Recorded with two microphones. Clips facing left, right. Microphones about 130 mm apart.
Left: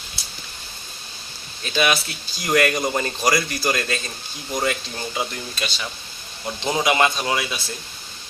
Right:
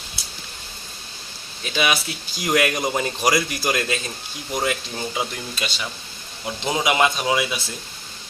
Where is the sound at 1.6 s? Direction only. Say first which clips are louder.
Left 1 dB; 5° right (ahead or behind).